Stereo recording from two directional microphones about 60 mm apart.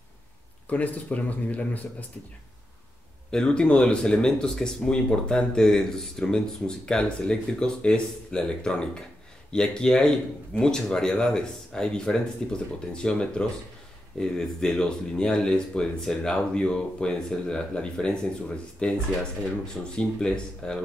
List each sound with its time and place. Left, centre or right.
0.7 s speech: left
3.3 s speech: centre